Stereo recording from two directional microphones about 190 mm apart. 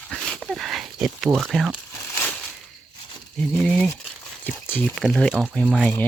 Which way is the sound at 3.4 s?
5° left (ahead or behind).